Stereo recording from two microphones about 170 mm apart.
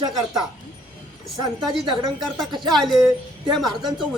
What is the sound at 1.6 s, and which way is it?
A man's voice, centre (ahead or behind).